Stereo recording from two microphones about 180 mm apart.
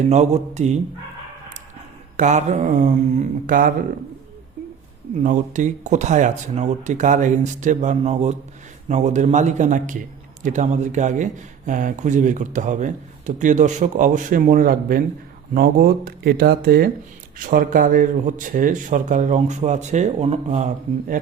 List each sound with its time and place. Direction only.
0.1 s a man's voice: 40° right (ahead or behind)
2.1 s speech: 40° right (ahead or behind)
5.2 s a man's voice: 45° right (ahead or behind)